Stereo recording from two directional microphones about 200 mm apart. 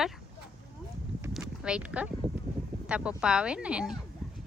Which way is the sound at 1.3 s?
5° right (ahead or behind).